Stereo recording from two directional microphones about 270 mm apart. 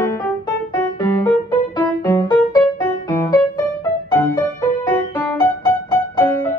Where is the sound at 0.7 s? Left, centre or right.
Centre.